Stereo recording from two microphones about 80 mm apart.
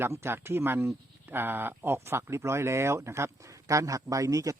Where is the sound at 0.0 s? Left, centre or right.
Right.